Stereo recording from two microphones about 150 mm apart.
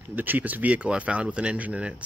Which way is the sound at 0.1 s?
10° right (ahead or behind).